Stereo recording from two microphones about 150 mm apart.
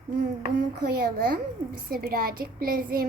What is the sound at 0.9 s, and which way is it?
Child singing, 85° right.